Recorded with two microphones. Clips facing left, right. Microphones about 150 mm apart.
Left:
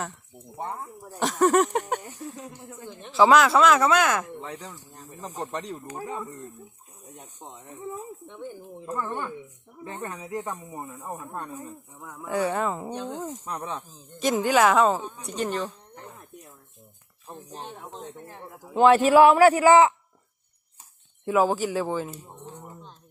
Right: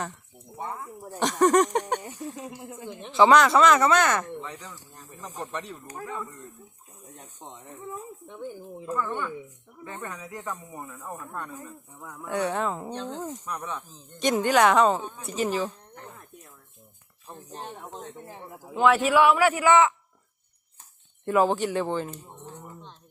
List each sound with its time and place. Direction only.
1.1 s speech: centre (ahead or behind)
4.4 s a man's voice: 35° left (ahead or behind)
7.2 s speech: 5° left (ahead or behind)
9.0 s speech: 30° left (ahead or behind)
11.9 s speech: centre (ahead or behind)
13.4 s speech: 25° left (ahead or behind)
14.2 s speech: centre (ahead or behind)
16.0 s a sound: 5° left (ahead or behind)
17.5 s speech: centre (ahead or behind)
18.7 s a man's voice: 30° left (ahead or behind)
21.2 s speech: 5° left (ahead or behind)